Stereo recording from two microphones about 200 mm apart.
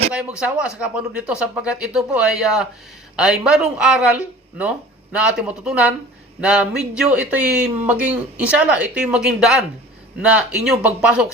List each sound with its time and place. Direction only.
0.1 s speech: 5° right (ahead or behind)